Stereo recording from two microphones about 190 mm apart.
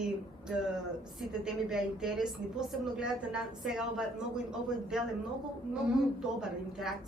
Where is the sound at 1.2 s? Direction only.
5° right (ahead or behind).